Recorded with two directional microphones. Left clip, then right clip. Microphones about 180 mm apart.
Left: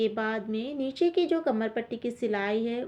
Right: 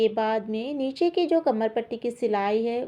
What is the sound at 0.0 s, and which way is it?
A woman's voice, 30° right (ahead or behind).